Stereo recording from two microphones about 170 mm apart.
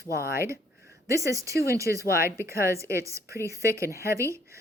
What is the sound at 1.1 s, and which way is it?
A woman's voice, 20° right (ahead or behind).